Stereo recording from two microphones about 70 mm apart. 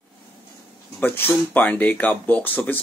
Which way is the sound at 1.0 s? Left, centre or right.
Left.